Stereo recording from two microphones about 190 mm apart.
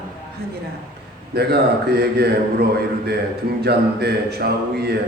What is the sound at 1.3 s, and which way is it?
Speech, 55° right (ahead or behind).